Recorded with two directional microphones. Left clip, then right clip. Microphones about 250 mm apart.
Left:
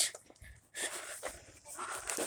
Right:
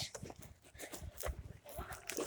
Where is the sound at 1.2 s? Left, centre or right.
Right.